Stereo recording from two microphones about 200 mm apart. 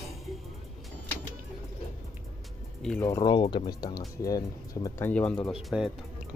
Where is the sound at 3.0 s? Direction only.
15° left (ahead or behind).